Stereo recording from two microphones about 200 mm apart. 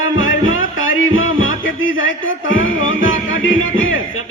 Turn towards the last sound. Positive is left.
turn(degrees=80)